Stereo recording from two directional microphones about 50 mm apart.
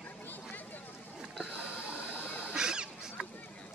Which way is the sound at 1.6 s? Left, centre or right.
Right.